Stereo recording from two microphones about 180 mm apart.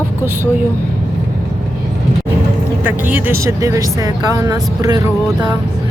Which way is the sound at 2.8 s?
10° right (ahead or behind).